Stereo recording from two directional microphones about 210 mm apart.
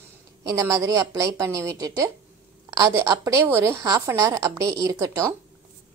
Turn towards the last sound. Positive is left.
turn(degrees=-15)  # may be behind; listen again after turning